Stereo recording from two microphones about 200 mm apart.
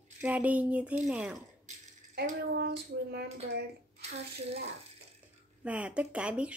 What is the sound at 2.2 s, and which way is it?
Child singing, 50° right (ahead or behind).